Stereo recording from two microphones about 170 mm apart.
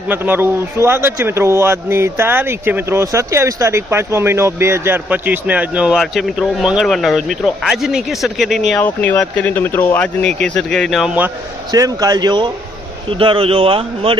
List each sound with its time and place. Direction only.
0.1 s speech: 10° right (ahead or behind)
11.7 s a man's voice: 20° right (ahead or behind)